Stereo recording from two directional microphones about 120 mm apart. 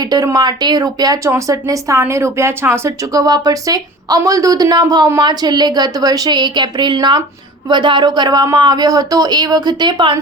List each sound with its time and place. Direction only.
0.0 s a woman's voice: 35° right (ahead or behind)